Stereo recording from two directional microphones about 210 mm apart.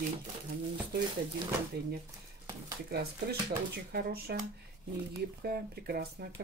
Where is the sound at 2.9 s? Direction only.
50° right (ahead or behind).